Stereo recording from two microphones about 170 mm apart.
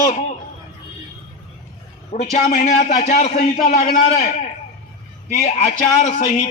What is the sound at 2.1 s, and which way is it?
A man's voice, 50° left (ahead or behind).